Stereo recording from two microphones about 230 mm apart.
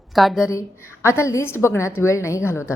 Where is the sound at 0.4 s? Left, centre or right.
Centre.